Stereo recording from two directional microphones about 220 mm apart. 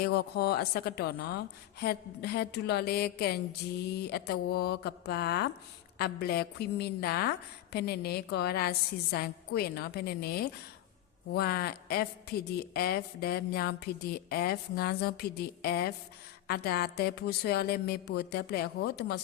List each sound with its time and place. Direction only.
0.0 s a woman's voice: 45° left (ahead or behind)